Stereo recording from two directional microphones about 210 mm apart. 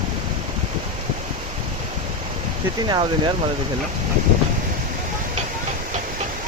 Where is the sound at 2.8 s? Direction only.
20° right (ahead or behind).